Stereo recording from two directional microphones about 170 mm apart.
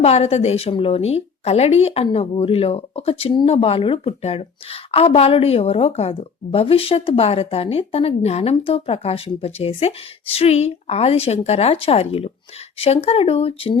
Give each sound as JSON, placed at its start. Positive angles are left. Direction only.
{"t": 0.0, "sound": "a woman's voice", "side_deg": 40}